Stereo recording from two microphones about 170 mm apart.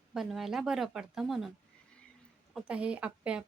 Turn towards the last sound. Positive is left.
turn(degrees=-5)  # may be behind; listen again after turning